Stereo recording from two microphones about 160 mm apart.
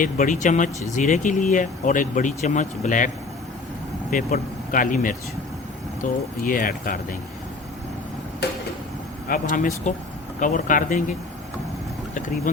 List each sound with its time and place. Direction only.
0.0 s speech: 55° left (ahead or behind)
4.1 s speech: 60° left (ahead or behind)
8.4 s a sound: 90° left
9.3 s speech: 55° left (ahead or behind)